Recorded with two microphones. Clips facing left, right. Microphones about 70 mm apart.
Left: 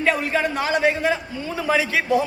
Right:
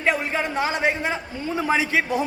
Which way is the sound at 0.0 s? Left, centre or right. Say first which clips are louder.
Left 2 dB; right.